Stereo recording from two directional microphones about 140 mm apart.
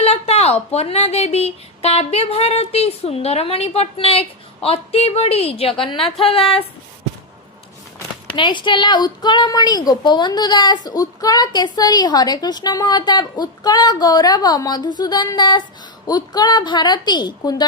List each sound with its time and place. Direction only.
0.0 s speech: 45° left (ahead or behind)
8.4 s a woman's voice: 35° left (ahead or behind)